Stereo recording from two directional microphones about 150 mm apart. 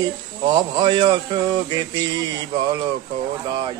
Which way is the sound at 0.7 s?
30° right (ahead or behind).